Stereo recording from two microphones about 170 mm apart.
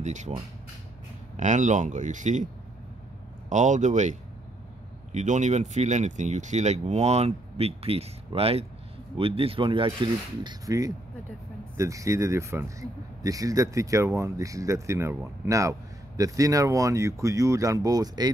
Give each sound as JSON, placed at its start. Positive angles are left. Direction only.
{"t": 0.0, "sound": "speech", "side_deg": -45}
{"t": 1.3, "sound": "speech", "side_deg": -45}